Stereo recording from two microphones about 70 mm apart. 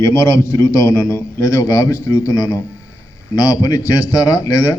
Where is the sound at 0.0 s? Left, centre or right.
Left.